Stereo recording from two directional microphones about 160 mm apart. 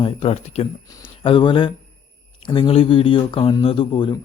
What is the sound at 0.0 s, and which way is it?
Speech, 35° left (ahead or behind).